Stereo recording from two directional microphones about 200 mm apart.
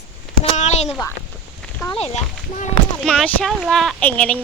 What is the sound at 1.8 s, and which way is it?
Speech, 30° left (ahead or behind).